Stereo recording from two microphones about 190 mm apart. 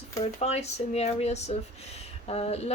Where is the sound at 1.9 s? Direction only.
35° left (ahead or behind).